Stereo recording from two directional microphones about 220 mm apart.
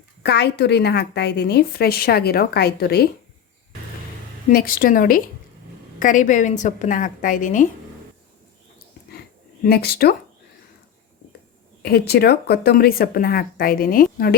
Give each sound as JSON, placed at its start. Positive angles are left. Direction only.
{"t": 0.2, "sound": "a woman's voice", "side_deg": 50}
{"t": 4.4, "sound": "a woman's voice", "side_deg": 40}
{"t": 9.6, "sound": "a woman's voice", "side_deg": 45}
{"t": 11.8, "sound": "a woman's voice", "side_deg": 45}